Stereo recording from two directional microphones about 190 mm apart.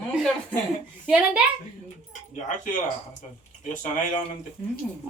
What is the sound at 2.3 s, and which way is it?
Speech, 40° left (ahead or behind).